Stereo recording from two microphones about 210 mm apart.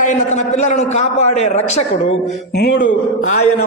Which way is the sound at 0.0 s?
35° left (ahead or behind).